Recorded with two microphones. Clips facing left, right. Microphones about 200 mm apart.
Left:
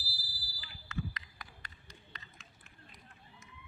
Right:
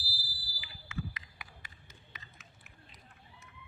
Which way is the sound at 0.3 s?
25° right (ahead or behind).